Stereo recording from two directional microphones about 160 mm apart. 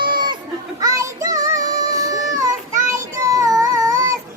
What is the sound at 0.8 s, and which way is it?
Child singing, 20° right (ahead or behind).